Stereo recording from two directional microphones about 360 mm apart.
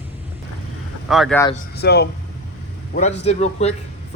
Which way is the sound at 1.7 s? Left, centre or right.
Left.